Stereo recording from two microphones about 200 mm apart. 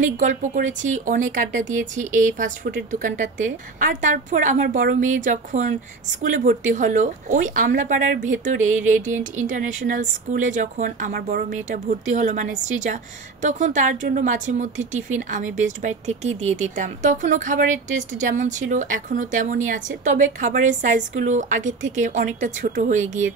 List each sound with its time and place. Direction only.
0.0 s speech: 40° right (ahead or behind)